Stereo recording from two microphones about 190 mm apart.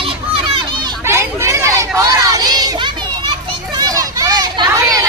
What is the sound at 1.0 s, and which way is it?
Hubbub, 15° right (ahead or behind).